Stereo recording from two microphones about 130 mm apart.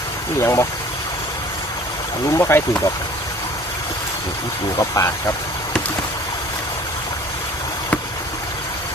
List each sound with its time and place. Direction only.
0.3 s speech: 20° left (ahead or behind)
2.4 s speech: 20° left (ahead or behind)
4.8 s speech: 25° left (ahead or behind)